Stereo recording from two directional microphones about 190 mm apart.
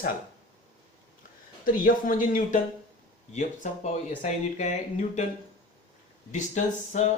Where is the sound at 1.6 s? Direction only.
45° left (ahead or behind).